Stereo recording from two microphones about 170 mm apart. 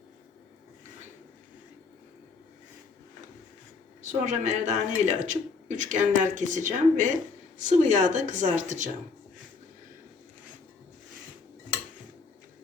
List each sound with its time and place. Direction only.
4.0 s speech: 45° right (ahead or behind)